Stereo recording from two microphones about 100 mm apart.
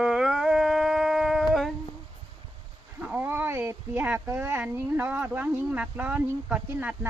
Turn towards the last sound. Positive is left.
turn(degrees=-15)  # may be behind; listen again after turning